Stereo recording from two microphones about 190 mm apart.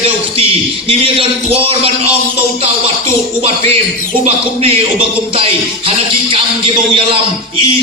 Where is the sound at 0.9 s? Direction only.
30° right (ahead or behind).